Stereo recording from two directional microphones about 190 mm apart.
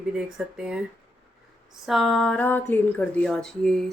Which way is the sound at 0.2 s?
5° right (ahead or behind).